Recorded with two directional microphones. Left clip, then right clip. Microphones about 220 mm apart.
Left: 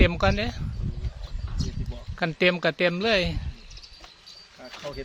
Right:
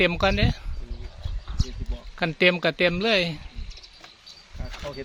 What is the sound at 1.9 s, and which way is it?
Speech, 5° right (ahead or behind).